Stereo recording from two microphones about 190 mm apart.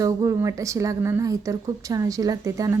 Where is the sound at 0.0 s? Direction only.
15° right (ahead or behind).